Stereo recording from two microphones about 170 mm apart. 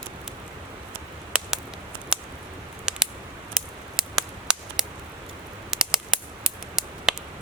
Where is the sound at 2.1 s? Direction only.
5° right (ahead or behind).